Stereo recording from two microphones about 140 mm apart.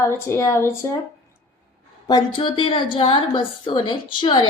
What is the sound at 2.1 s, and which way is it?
A woman's voice, 30° left (ahead or behind).